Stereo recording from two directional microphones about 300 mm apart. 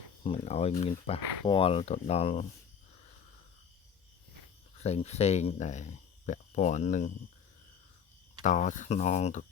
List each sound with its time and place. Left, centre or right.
0.3 s speech: centre
4.8 s speech: left
8.4 s speech: left